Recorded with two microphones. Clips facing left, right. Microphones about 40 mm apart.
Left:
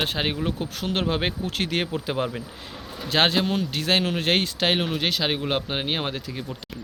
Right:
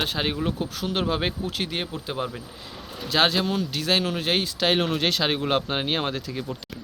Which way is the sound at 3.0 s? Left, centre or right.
Left.